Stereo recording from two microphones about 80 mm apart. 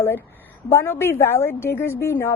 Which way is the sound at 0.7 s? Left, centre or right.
Left.